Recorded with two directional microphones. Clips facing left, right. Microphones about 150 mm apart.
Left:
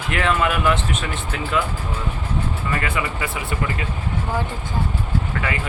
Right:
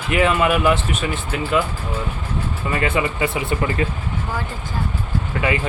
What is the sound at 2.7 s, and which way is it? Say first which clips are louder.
Speech: right 6 dB; 25° right (ahead or behind).